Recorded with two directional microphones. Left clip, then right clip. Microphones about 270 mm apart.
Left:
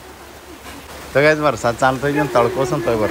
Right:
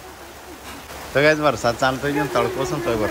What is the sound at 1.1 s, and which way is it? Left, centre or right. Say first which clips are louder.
A man's voice: left 2 dB; centre.